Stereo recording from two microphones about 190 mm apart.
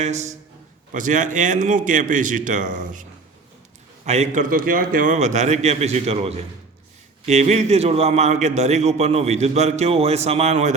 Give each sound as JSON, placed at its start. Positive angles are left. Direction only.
{"t": 0.0, "sound": "a man's voice", "side_deg": -35}